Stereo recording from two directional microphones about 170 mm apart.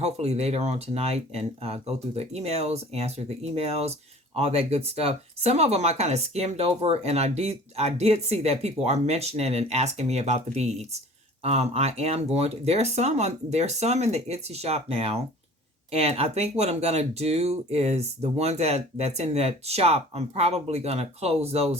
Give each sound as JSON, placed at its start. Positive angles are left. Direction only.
{"t": 0.0, "sound": "speech", "side_deg": -40}